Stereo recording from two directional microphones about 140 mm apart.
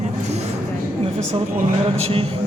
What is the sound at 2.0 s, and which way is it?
Speech, 45° right (ahead or behind).